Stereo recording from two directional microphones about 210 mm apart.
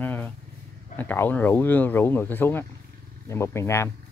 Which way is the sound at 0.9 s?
10° left (ahead or behind).